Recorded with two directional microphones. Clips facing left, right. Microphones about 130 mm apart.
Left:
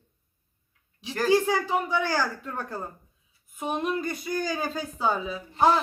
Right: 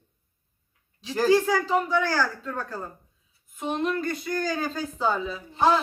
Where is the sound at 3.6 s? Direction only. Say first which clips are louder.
Right 1 dB; 5° left (ahead or behind).